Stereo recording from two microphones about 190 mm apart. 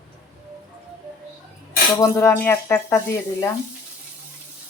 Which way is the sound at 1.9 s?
15° left (ahead or behind).